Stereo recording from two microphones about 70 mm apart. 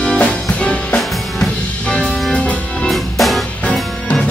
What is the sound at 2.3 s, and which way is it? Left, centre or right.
Music, centre.